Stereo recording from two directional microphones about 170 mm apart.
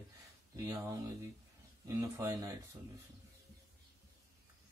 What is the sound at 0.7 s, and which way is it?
Speech, 15° right (ahead or behind).